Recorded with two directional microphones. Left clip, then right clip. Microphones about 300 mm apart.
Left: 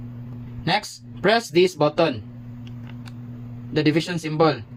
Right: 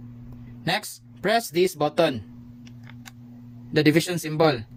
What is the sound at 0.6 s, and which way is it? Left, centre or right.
Speech, right.